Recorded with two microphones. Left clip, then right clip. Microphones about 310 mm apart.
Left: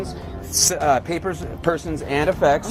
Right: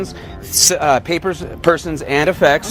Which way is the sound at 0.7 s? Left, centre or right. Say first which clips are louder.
Right 5 dB; right.